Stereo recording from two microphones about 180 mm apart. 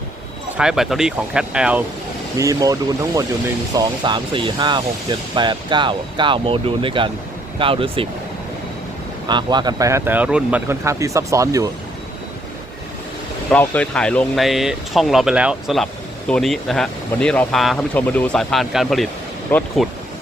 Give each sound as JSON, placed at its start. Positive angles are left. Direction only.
{"t": 0.5, "sound": "speech", "side_deg": -5}
{"t": 2.4, "sound": "speech", "side_deg": -20}
{"t": 9.2, "sound": "speech", "side_deg": -25}
{"t": 13.5, "sound": "speech", "side_deg": 5}